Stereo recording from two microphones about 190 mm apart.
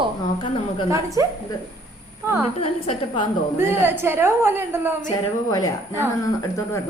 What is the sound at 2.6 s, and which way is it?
Speech, 30° left (ahead or behind).